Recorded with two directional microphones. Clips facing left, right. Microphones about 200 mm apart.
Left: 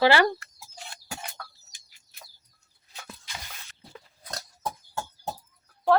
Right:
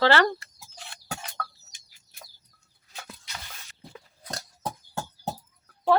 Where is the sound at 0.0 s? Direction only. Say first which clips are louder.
Left 1 dB; 10° left (ahead or behind).